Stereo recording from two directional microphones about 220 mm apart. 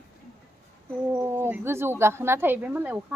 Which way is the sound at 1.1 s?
10° right (ahead or behind).